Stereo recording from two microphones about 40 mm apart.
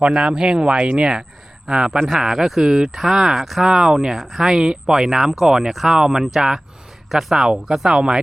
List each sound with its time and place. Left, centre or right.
0.0 s speech: right
4.2 s speech: centre
4.4 s speech: centre
6.0 s speech: centre